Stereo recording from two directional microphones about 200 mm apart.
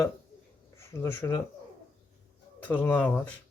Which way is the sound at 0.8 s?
15° left (ahead or behind).